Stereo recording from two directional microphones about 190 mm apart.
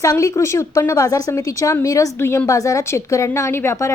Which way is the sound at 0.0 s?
15° left (ahead or behind).